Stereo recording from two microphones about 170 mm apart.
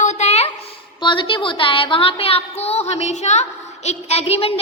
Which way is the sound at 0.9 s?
30° left (ahead or behind).